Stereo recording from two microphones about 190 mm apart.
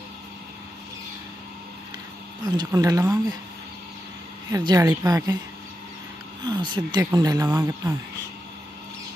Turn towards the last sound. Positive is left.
turn(degrees=-15)  # may be behind; listen again after turning